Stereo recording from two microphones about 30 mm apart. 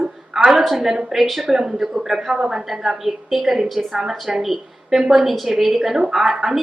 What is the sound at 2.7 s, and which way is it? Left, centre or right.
A woman's voice, centre.